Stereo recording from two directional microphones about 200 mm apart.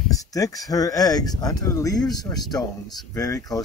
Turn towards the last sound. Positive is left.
turn(degrees=15)  # may be behind; listen again after turning